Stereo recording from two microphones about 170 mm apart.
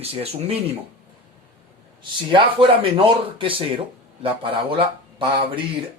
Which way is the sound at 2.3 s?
30° right (ahead or behind).